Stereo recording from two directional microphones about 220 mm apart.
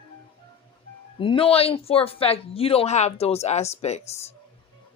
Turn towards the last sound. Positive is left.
turn(degrees=30)  # may be behind; listen again after turning